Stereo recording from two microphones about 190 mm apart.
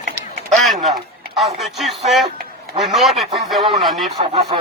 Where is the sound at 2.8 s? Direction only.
Centre (ahead or behind).